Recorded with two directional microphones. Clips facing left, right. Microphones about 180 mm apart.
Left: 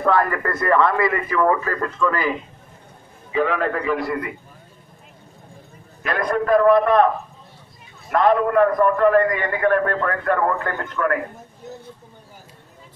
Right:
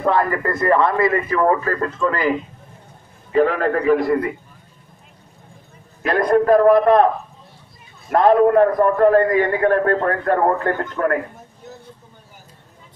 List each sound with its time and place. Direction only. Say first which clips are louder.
0.0 s speech: right 1 dB; 20° right (ahead or behind)
3.3 s a man's voice: right 4 dB; 40° right (ahead or behind)
6.0 s a man's voice: right 6 dB; 35° right (ahead or behind)
8.1 s a man's voice: right 4 dB; 35° right (ahead or behind)